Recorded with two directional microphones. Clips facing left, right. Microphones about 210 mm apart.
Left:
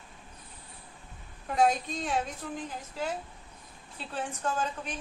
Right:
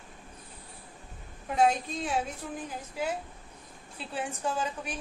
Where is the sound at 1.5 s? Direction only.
Centre (ahead or behind).